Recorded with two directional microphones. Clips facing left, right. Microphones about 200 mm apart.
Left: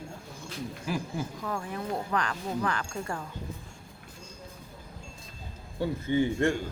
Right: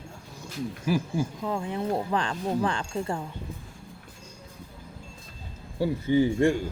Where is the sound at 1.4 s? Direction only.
20° right (ahead or behind).